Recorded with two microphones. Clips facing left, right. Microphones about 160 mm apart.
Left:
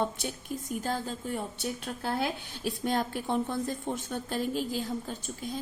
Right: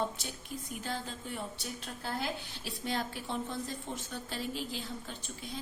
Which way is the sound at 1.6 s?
60° left (ahead or behind).